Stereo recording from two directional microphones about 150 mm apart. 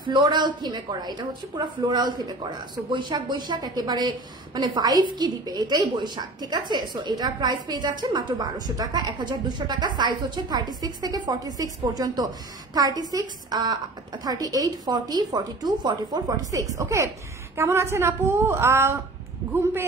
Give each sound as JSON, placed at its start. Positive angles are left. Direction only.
{"t": 0.0, "sound": "a woman's voice", "side_deg": -30}